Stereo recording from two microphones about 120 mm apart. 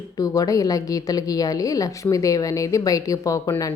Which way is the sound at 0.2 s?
30° left (ahead or behind).